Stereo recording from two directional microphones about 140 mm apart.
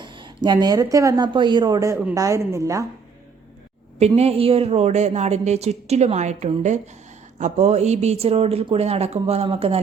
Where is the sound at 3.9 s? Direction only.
50° right (ahead or behind).